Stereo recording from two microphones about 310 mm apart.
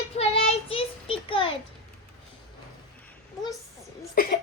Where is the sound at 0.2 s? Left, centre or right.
Centre.